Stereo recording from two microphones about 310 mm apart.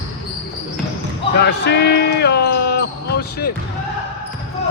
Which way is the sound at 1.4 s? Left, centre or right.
Left.